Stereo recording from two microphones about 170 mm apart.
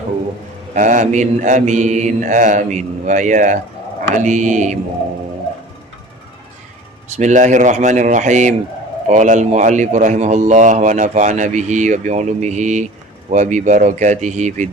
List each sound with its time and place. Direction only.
0.7 s speech: 45° right (ahead or behind)
7.1 s speech: 45° right (ahead or behind)